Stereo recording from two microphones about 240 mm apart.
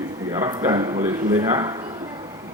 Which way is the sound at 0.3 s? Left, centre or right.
Centre.